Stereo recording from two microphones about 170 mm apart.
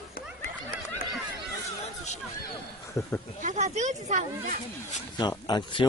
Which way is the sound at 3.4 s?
45° right (ahead or behind).